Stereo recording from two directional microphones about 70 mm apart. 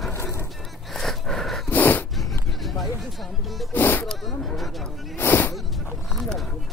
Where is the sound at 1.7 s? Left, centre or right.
Left.